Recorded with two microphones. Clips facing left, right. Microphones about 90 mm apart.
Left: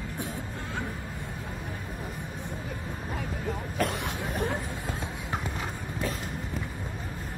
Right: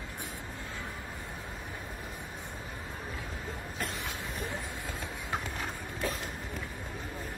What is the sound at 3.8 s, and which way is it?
Cough, 65° left (ahead or behind).